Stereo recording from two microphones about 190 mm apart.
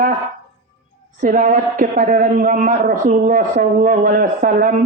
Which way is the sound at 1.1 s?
45° right (ahead or behind).